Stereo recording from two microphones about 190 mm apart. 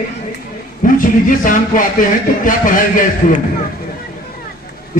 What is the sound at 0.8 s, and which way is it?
Speech, 45° left (ahead or behind).